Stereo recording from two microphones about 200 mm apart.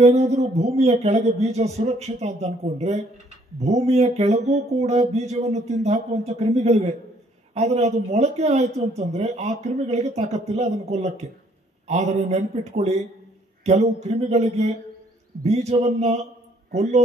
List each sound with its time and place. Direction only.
0.0 s a man's voice: 35° right (ahead or behind)